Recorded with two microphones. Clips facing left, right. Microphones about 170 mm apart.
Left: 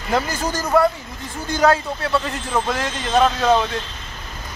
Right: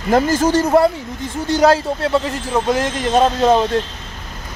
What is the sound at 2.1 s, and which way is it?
A man's voice, 20° right (ahead or behind).